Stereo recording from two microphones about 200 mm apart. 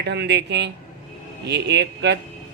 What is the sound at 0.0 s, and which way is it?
Speech, 60° right (ahead or behind).